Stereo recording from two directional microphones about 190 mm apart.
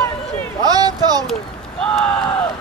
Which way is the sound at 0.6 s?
20° right (ahead or behind).